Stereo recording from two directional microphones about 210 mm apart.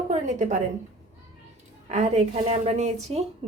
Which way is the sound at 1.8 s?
30° right (ahead or behind).